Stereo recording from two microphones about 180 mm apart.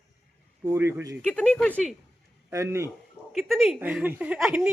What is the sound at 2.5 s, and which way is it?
Speech, 15° right (ahead or behind).